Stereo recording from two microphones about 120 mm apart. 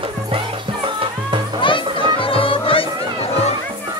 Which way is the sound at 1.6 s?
45° left (ahead or behind).